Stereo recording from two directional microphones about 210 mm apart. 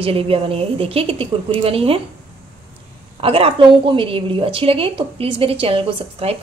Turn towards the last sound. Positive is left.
turn(degrees=-25)  # may be behind; listen again after turning